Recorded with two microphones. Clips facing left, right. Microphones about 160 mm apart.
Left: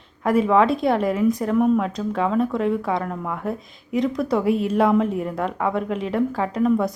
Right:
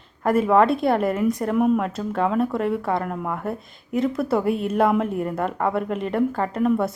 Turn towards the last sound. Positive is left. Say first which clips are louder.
# left 1 dB
turn(degrees=-5)  # may be behind; listen again after turning